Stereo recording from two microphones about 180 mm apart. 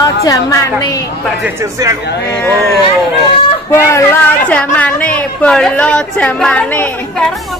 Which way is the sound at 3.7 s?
15° left (ahead or behind).